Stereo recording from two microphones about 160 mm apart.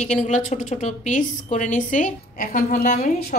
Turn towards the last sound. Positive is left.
turn(degrees=55)  # may be behind; listen again after turning